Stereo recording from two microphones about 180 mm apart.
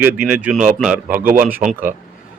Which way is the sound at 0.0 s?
5° right (ahead or behind).